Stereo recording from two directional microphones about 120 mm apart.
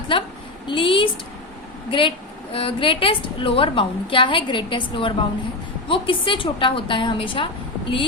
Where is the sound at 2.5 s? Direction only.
50° left (ahead or behind).